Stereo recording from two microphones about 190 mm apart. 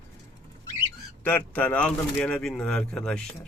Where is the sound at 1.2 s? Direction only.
10° left (ahead or behind).